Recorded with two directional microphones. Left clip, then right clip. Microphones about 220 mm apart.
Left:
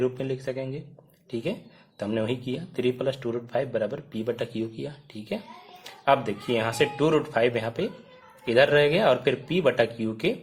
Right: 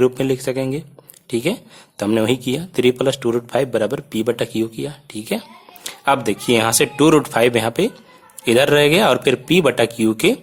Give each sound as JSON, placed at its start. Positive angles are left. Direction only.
{"t": 0.0, "sound": "speech", "side_deg": -35}